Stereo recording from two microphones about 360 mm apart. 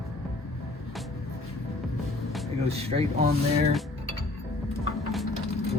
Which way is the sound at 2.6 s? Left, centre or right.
Centre.